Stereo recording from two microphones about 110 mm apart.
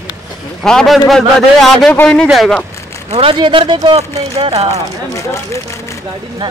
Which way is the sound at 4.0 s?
70° right (ahead or behind).